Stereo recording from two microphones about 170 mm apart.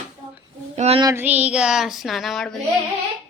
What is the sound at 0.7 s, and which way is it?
Child singing, 40° right (ahead or behind).